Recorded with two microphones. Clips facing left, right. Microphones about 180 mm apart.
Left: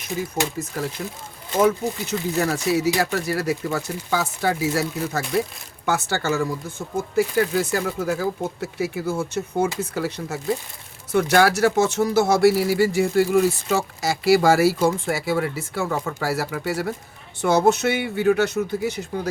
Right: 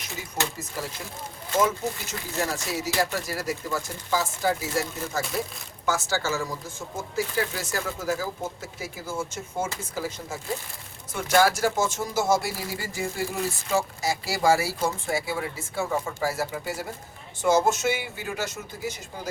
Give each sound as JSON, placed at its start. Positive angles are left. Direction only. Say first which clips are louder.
{"t": 1.6, "sound": "speech", "louder": "left 6 dB", "side_deg": 65}